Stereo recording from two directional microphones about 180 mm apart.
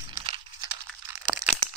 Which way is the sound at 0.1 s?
25° right (ahead or behind).